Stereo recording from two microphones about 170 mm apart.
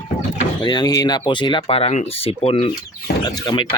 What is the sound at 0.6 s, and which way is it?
Speech, 25° left (ahead or behind).